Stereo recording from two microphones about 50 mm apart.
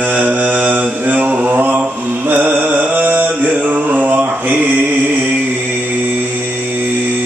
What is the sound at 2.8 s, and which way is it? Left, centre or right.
Mantra, right.